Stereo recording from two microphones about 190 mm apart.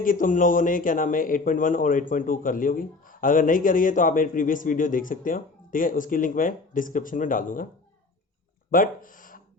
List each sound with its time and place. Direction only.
0.0 s a man's voice: 45° left (ahead or behind)
8.7 s speech: 45° left (ahead or behind)